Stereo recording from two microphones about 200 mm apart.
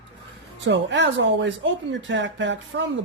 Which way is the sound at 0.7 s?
65° right (ahead or behind).